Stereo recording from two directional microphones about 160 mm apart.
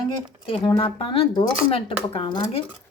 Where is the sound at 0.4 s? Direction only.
35° left (ahead or behind).